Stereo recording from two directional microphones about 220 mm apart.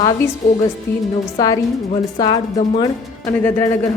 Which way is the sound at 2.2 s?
20° left (ahead or behind).